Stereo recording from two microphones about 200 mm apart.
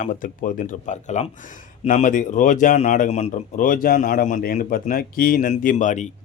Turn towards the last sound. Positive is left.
turn(degrees=40)  # may be behind; listen again after turning